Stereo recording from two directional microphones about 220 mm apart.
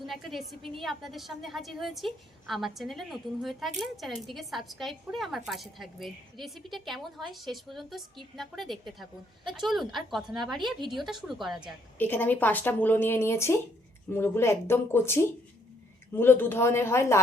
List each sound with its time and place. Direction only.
0.0 s a woman's voice: centre (ahead or behind)
9.4 s a woman's voice: 20° right (ahead or behind)
9.6 s a woman's voice: centre (ahead or behind)